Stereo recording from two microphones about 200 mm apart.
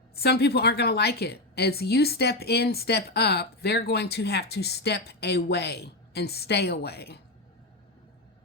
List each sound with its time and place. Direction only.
0.2 s a woman's voice: 55° left (ahead or behind)